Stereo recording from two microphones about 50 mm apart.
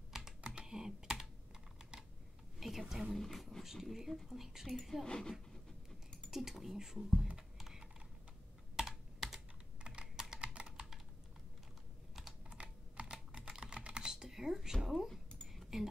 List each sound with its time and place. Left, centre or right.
0.1 s computer keyboard: centre
2.6 s speech: centre
5.0 s speech: centre
6.3 s speech: centre
7.5 s typing: centre
8.8 s computer keyboard: centre
9.8 s computer keyboard: centre
10.3 s typing: centre
12.4 s typing: right; by 15.1 s centre
15.4 s a sound: centre